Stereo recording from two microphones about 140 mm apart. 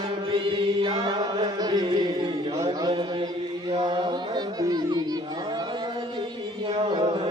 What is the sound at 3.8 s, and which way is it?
Music, 30° right (ahead or behind).